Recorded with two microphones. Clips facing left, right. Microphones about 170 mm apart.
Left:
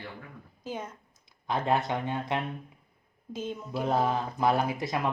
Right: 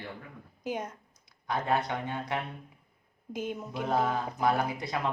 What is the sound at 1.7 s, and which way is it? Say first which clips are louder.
Speech: left 3 dB; 20° left (ahead or behind).